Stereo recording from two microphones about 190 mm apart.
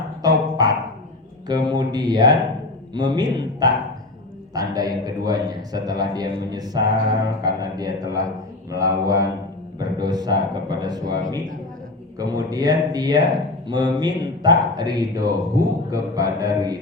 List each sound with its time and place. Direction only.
0.2 s a sound: 20° right (ahead or behind)
1.5 s speech: 20° right (ahead or behind)
8.7 s mantra: 15° right (ahead or behind)
9.7 s speech: 20° right (ahead or behind)